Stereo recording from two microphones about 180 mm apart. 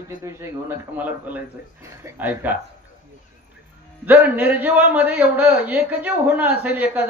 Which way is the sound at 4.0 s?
10° right (ahead or behind).